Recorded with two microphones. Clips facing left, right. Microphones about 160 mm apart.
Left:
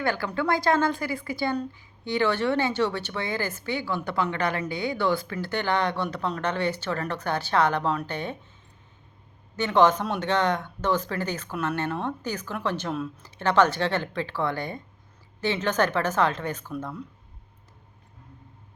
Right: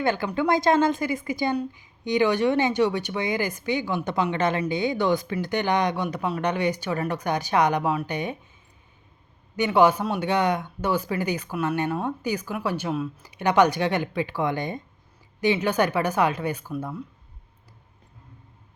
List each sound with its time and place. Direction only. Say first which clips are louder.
0.0 s speech: right 3 dB; 20° right (ahead or behind)
9.6 s speech: right 1 dB; 10° right (ahead or behind)